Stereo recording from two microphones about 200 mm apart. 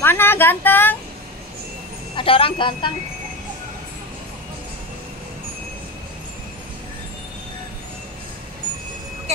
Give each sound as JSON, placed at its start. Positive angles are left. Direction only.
{"t": 0.0, "sound": "a woman's voice", "side_deg": 10}
{"t": 2.1, "sound": "a woman's voice", "side_deg": 25}